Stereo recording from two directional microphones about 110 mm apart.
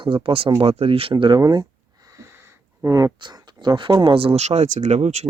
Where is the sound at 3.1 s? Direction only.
45° right (ahead or behind); by 5.3 s 90° right.